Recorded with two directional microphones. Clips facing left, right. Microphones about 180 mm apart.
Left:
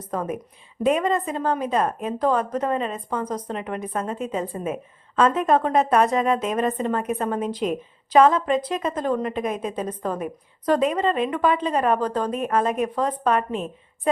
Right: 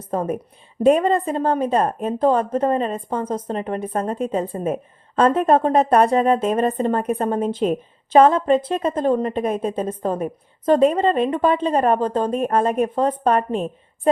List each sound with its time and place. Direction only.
0.0 s a woman's voice: 30° right (ahead or behind)